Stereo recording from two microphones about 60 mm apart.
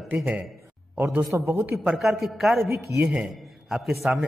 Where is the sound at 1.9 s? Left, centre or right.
Centre.